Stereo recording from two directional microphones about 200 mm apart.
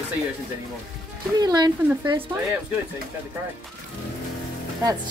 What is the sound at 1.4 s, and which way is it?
Speech, 20° right (ahead or behind).